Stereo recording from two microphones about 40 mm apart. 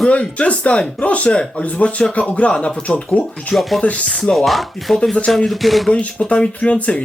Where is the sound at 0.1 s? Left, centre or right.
Left.